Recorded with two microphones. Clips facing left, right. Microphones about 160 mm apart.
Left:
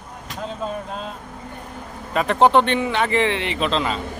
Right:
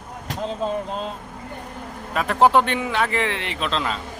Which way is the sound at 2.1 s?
Centre (ahead or behind).